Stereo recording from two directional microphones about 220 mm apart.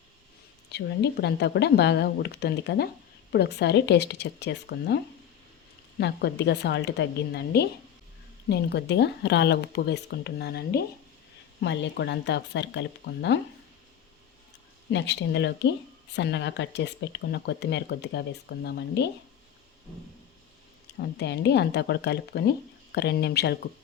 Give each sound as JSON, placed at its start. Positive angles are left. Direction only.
{"t": 0.7, "sound": "speech", "side_deg": 50}
{"t": 6.0, "sound": "speech", "side_deg": 50}
{"t": 14.8, "sound": "speech", "side_deg": 55}
{"t": 21.2, "sound": "speech", "side_deg": 50}